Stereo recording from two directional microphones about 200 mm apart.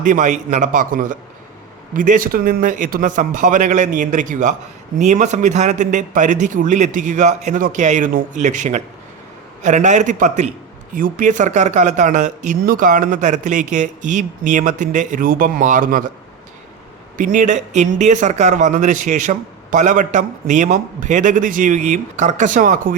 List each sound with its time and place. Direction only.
0.0 s a man's voice: 40° right (ahead or behind)
17.2 s a man's voice: 40° right (ahead or behind)